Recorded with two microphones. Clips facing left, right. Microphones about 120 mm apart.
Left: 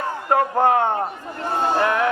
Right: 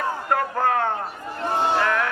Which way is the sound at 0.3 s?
25° left (ahead or behind).